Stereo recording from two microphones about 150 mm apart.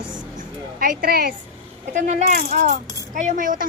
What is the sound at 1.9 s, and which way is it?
Speech, 50° right (ahead or behind).